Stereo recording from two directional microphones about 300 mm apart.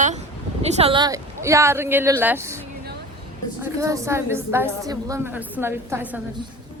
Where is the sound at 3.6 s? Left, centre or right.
Centre.